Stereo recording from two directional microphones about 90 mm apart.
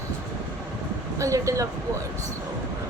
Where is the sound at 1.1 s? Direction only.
35° right (ahead or behind).